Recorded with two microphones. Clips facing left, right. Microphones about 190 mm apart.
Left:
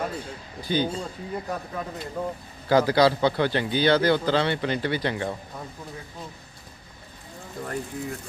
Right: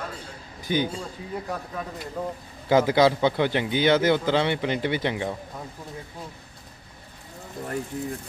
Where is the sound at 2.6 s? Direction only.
20° right (ahead or behind).